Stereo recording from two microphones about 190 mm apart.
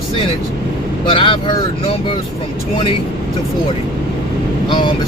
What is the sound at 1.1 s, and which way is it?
Speech, 25° left (ahead or behind).